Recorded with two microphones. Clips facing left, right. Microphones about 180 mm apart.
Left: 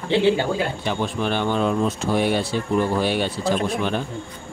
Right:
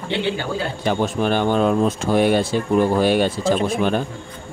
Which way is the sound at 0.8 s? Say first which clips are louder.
Right 4 dB; 45° right (ahead or behind).